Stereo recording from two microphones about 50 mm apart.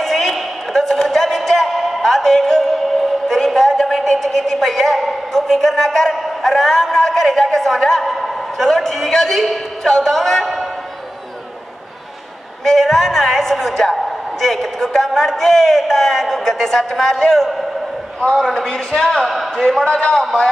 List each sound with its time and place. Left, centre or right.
0.0 s a sound: centre
12.6 s a woman's voice: centre
18.7 s speech: centre
19.0 s speech: centre
19.8 s a man's voice: left